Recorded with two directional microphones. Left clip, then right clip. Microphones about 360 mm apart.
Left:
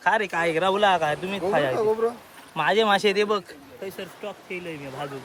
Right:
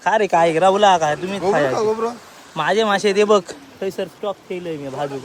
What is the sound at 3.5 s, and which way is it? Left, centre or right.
Speech, centre.